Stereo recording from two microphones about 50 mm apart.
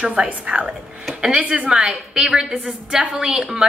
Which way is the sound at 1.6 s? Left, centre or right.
Centre.